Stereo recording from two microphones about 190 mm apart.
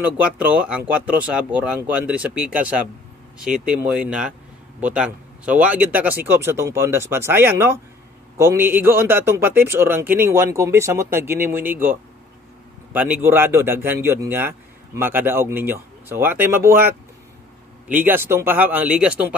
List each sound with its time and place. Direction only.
0.2 s a man's voice: 10° right (ahead or behind)